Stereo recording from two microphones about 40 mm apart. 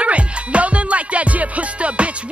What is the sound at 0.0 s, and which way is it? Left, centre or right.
Music, right.